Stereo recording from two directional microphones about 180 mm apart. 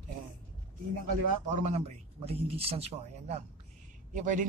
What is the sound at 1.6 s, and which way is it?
Speech, 40° right (ahead or behind).